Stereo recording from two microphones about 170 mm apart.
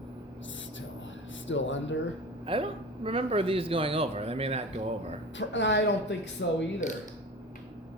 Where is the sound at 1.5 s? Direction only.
90° left.